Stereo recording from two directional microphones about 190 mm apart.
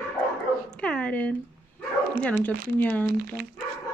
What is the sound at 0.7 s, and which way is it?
Dog, 5° left (ahead or behind).